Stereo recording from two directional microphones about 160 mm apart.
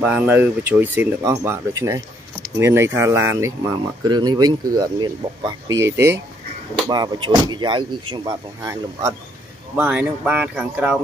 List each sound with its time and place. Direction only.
0.0 s speech: 10° right (ahead or behind); by 8.4 s 30° right (ahead or behind)
9.8 s speech: 10° right (ahead or behind)